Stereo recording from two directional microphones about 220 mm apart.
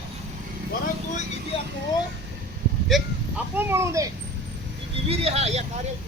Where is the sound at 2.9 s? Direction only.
5° right (ahead or behind).